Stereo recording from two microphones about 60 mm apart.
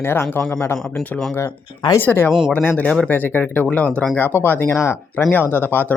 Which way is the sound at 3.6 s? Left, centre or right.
Left.